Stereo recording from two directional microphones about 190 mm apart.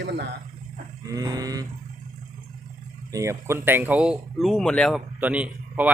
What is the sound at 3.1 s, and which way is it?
Speech, 15° right (ahead or behind).